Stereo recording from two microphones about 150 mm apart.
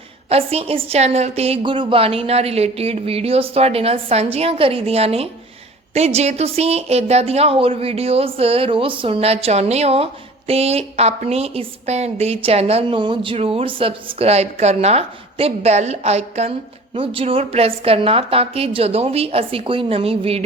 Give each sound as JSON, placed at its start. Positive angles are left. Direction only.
{"t": 0.3, "sound": "speech", "side_deg": -40}